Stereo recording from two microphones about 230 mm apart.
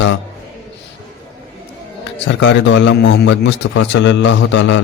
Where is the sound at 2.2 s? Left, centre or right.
Left.